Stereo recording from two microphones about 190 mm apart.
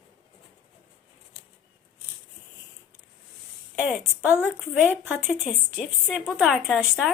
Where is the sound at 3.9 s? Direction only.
10° right (ahead or behind).